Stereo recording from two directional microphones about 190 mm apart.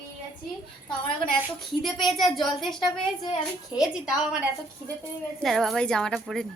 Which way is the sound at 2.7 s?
25° left (ahead or behind).